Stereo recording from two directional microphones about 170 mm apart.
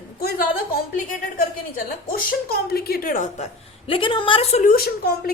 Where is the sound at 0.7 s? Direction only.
55° left (ahead or behind).